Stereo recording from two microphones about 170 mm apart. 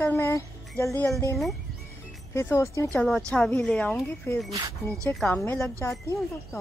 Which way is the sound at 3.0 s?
5° left (ahead or behind).